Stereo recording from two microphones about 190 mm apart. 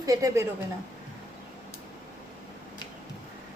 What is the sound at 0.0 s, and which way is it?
Speech, 20° right (ahead or behind).